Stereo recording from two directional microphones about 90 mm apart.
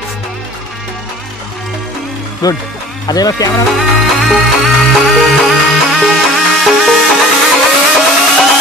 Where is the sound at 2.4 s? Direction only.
45° left (ahead or behind).